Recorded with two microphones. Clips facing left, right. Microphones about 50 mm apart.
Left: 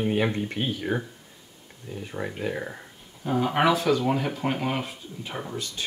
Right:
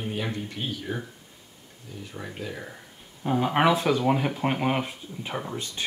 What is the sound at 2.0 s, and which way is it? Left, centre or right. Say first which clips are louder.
Speech: left 5 dB; left.